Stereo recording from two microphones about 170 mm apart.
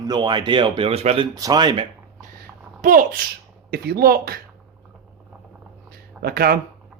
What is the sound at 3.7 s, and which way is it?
Speech, 65° right (ahead or behind).